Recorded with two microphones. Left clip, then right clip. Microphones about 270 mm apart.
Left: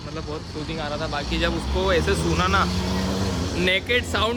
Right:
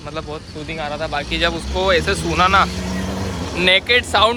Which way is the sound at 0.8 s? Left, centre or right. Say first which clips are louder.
Right 5 dB; centre.